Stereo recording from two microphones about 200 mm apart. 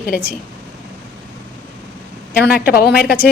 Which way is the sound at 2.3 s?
45° left (ahead or behind).